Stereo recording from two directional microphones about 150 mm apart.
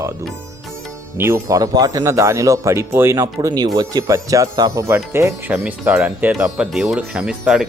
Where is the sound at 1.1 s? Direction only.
15° right (ahead or behind).